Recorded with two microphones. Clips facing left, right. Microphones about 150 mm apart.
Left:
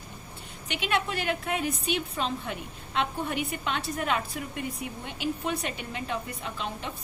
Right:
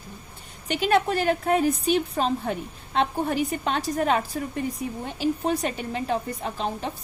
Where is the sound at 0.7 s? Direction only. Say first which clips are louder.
Right 7 dB; 40° right (ahead or behind).